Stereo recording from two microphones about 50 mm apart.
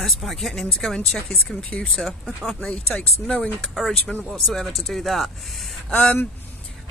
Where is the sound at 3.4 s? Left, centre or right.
Centre.